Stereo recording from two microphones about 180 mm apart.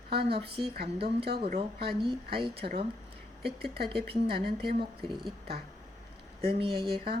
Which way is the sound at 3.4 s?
60° right (ahead or behind).